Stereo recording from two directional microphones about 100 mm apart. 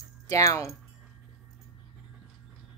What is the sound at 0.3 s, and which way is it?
Speech, 35° left (ahead or behind).